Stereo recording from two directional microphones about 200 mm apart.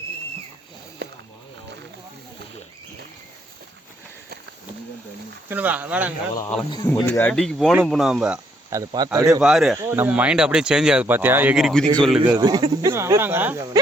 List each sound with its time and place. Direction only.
5.5 s speech: 10° right (ahead or behind)
6.8 s speech: 5° left (ahead or behind)
8.7 s speech: 20° right (ahead or behind)
9.4 s speech: 5° right (ahead or behind)
12.2 s speech: 20° right (ahead or behind)